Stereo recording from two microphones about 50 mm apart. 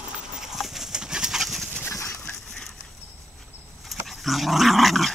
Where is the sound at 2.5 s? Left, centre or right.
Centre.